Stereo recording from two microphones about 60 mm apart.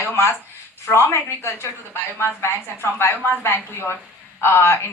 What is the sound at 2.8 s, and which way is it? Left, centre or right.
Speech, left.